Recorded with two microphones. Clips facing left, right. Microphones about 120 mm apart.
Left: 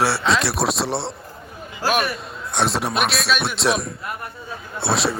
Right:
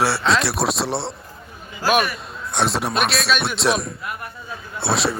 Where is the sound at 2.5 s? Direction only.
Centre (ahead or behind).